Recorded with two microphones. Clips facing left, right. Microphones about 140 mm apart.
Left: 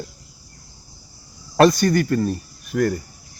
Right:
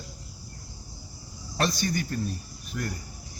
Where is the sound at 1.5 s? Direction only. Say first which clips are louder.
Left 13 dB; 85° left.